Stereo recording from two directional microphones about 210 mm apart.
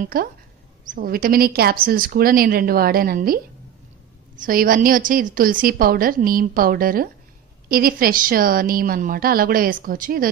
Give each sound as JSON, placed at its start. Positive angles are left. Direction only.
{"t": 0.0, "sound": "a woman's voice", "side_deg": -45}
{"t": 4.4, "sound": "a woman's voice", "side_deg": -45}